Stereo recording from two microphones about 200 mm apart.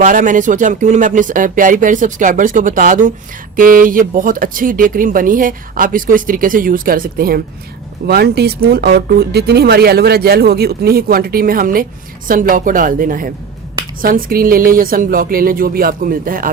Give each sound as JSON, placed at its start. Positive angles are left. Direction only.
{"t": 0.0, "sound": "speech", "side_deg": -40}